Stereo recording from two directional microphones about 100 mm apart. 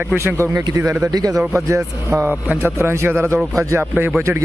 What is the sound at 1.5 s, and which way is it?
Speech, 25° right (ahead or behind).